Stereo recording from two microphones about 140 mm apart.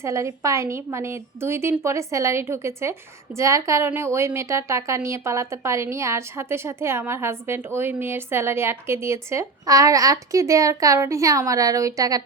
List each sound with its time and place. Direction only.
0.0 s a woman's voice: 20° right (ahead or behind)